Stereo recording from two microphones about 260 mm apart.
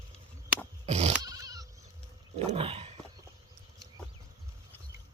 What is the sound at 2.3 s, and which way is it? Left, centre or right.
Roaring cats, right.